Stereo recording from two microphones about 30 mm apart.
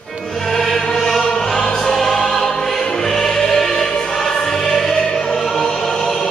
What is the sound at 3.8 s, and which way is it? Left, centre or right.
Choir, left.